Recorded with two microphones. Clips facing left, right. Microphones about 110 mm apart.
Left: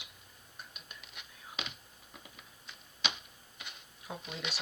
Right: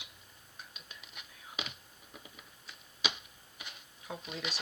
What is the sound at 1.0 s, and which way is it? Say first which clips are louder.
Whispering: even; centre (ahead or behind).